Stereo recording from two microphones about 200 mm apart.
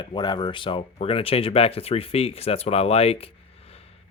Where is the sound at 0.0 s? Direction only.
25° left (ahead or behind).